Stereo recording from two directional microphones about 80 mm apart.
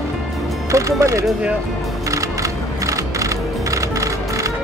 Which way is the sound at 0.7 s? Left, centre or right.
Right.